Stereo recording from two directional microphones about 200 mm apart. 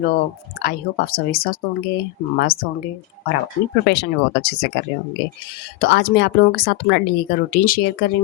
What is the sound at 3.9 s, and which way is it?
Speech, 60° left (ahead or behind).